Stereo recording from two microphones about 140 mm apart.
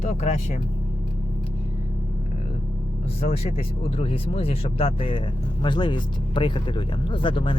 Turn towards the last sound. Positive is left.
turn(degrees=40)  # may be behind; listen again after turning